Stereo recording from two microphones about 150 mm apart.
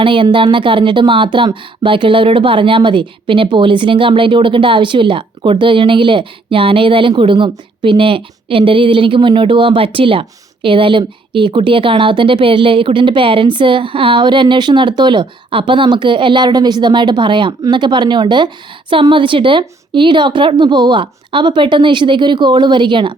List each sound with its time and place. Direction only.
0.0 s a woman's voice: 35° right (ahead or behind)